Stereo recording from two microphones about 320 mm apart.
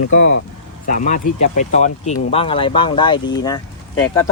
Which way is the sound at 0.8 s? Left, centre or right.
Left.